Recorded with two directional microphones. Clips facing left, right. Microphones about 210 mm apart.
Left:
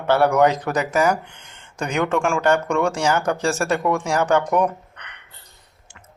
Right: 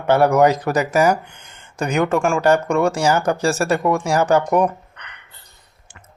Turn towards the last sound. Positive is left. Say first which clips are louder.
# right 2 dB
turn(degrees=-5)  # may be behind; listen again after turning